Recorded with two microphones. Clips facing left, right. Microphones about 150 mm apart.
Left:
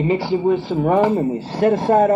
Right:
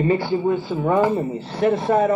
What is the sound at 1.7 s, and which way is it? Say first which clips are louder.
Speech: left 4 dB; 40° left (ahead or behind).